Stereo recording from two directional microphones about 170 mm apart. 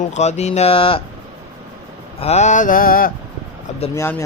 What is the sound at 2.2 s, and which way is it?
Speech, 40° left (ahead or behind).